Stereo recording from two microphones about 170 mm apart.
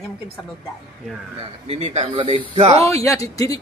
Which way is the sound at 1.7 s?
40° right (ahead or behind).